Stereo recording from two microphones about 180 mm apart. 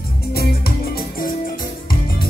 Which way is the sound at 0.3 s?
60° left (ahead or behind).